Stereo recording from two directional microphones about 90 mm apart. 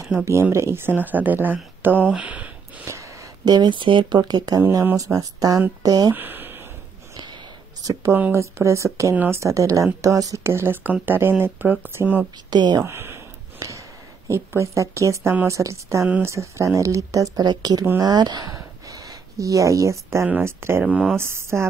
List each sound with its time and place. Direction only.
0.0 s speech: 30° right (ahead or behind); by 2.9 s 15° right (ahead or behind)
2.9 s a sound: 35° right (ahead or behind)
3.4 s speech: 55° right (ahead or behind)
4.2 s speech: 45° right (ahead or behind)
6.1 s a sound: 20° right (ahead or behind)
7.8 s speech: 40° right (ahead or behind)
9.1 s speech: 20° right (ahead or behind)
9.4 s speech: 35° right (ahead or behind)
10.4 s speech: 30° right (ahead or behind)
12.4 s speech: 50° right (ahead or behind)
12.8 s a sound: 25° right (ahead or behind)
15.4 s speech: 35° right (ahead or behind)
20.8 s speech: 5° right (ahead or behind)
21.2 s speech: 30° right (ahead or behind)